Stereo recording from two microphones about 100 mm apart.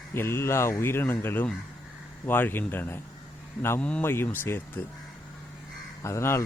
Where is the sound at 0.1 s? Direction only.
25° left (ahead or behind).